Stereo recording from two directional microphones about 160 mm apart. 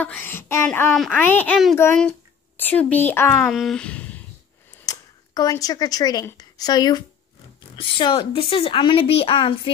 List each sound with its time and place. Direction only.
0.0 s a sound: 10° left (ahead or behind)
0.7 s speech: 5° left (ahead or behind)
3.4 s speech: centre (ahead or behind)
4.8 s a woman's voice: 25° left (ahead or behind)